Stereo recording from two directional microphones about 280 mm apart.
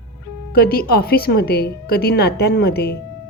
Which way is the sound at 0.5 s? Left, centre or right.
Left.